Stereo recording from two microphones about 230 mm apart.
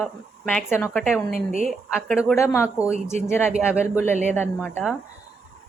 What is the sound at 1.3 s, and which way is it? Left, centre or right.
Speech, left.